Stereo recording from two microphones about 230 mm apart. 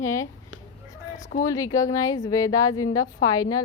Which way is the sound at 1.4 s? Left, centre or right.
Centre.